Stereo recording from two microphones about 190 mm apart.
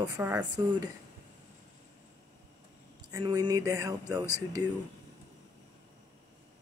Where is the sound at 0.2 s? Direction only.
5° right (ahead or behind).